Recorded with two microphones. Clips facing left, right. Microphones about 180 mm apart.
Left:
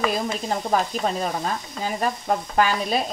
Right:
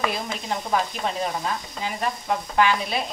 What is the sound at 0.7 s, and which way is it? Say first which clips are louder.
Stir: left 2 dB; 40° left (ahead or behind).